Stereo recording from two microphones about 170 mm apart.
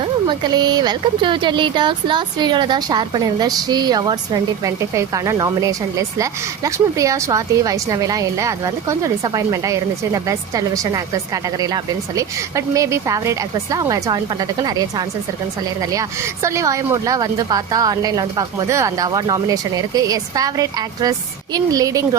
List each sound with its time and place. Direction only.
0.3 s speech: 25° right (ahead or behind)